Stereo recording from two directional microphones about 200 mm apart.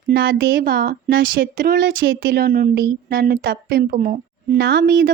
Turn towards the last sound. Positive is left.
turn(degrees=-50)  # may be behind; listen again after turning